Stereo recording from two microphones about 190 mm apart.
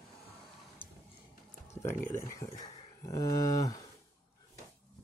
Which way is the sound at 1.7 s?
15° left (ahead or behind).